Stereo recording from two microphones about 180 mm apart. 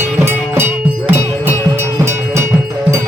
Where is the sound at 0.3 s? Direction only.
15° right (ahead or behind).